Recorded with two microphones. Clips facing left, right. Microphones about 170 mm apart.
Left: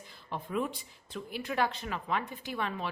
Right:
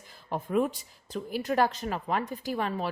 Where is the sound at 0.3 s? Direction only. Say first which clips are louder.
Right 6 dB; 45° right (ahead or behind).